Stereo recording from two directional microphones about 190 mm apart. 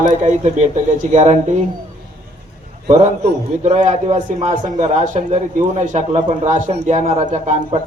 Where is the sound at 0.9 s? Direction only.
40° right (ahead or behind).